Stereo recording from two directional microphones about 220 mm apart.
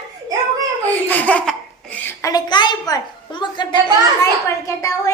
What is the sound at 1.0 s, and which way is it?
Belly laugh, 5° left (ahead or behind).